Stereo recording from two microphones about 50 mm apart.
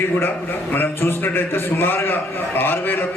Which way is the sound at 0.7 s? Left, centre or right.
Left.